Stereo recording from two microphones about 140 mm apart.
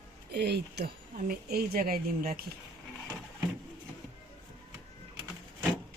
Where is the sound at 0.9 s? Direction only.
90° right.